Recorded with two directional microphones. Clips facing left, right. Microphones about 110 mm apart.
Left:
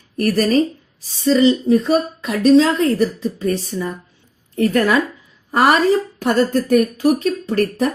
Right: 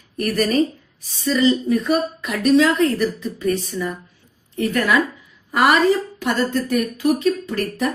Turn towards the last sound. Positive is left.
turn(degrees=35)  # may be behind; listen again after turning